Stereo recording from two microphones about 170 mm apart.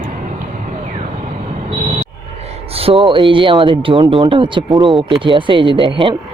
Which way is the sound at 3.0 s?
30° right (ahead or behind).